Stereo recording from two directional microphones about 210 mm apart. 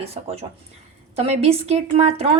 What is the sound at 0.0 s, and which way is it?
Speech, 30° right (ahead or behind).